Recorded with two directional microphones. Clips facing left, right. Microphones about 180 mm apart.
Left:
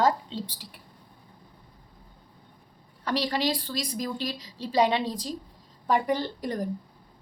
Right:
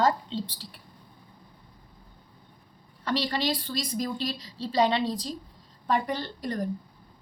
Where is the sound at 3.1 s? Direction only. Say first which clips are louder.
Left 1 dB; 10° left (ahead or behind).